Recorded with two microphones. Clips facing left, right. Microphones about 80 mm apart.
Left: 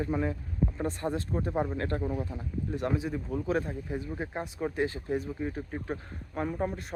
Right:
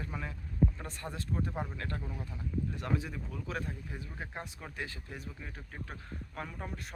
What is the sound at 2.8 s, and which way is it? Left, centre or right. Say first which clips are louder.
Speech: left 5 dB; left.